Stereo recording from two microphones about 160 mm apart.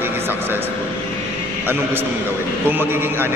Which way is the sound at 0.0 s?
15° right (ahead or behind).